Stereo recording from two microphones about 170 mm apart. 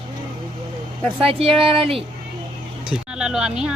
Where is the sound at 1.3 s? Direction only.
35° right (ahead or behind).